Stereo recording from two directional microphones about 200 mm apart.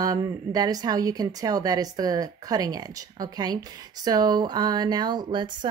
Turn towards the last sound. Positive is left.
turn(degrees=-20)  # may be behind; listen again after turning